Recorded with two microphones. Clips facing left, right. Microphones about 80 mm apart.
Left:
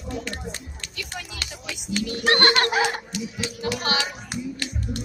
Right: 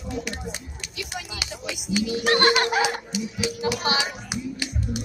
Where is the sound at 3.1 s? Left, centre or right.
Centre.